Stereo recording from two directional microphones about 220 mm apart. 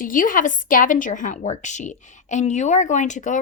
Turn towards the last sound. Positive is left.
turn(degrees=35)  # may be behind; listen again after turning